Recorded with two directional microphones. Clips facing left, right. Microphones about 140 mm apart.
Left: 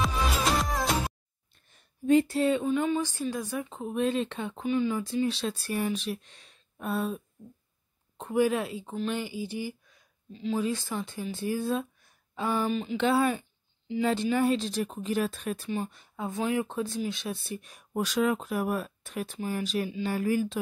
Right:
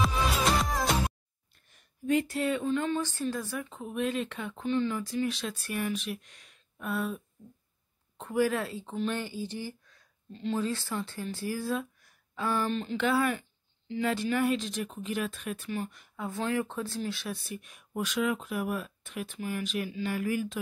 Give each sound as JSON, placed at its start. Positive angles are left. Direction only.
{"t": 0.0, "sound": "music", "side_deg": 0}
{"t": 1.5, "sound": "a sound", "side_deg": 30}
{"t": 2.6, "sound": "speech", "side_deg": 10}
{"t": 4.6, "sound": "a woman's voice", "side_deg": 10}
{"t": 5.0, "sound": "a woman's voice", "side_deg": 25}
{"t": 8.9, "sound": "speech", "side_deg": 0}
{"t": 9.2, "sound": "speech", "side_deg": 10}
{"t": 10.6, "sound": "speech", "side_deg": 15}
{"t": 12.4, "sound": "speech", "side_deg": 5}
{"t": 12.9, "sound": "speech", "side_deg": 25}
{"t": 16.3, "sound": "speech", "side_deg": 15}